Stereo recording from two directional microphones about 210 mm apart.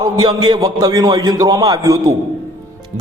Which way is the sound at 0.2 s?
20° right (ahead or behind).